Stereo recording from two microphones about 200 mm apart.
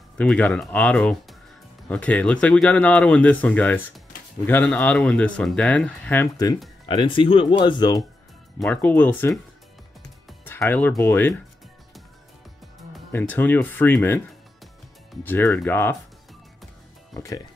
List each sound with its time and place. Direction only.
0.2 s speech: 5° left (ahead or behind); by 8.0 s 20° left (ahead or behind)
8.5 s speech: 5° left (ahead or behind)
13.2 s speech: 10° left (ahead or behind)
15.2 s speech: 10° left (ahead or behind)